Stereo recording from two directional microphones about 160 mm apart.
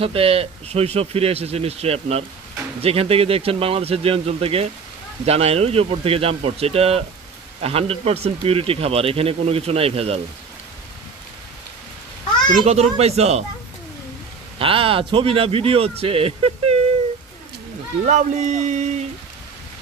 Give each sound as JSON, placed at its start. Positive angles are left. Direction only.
{"t": 0.0, "sound": "speech", "side_deg": -35}
{"t": 12.6, "sound": "speech", "side_deg": -40}
{"t": 14.6, "sound": "speech", "side_deg": -35}
{"t": 18.0, "sound": "speech", "side_deg": -50}